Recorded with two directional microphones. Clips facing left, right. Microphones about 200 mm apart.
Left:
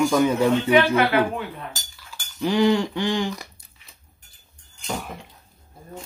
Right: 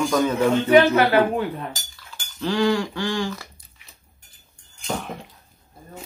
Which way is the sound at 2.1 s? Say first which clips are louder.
Left 2 dB; 15° left (ahead or behind).